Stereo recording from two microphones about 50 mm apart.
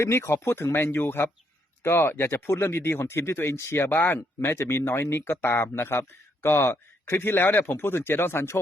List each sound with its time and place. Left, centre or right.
0.0 s speech: left
0.7 s speech: left
1.8 s speech: left
3.8 s speech: left
7.0 s speech: left